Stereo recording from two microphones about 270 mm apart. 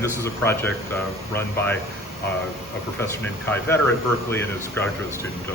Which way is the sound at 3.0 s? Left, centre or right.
Centre.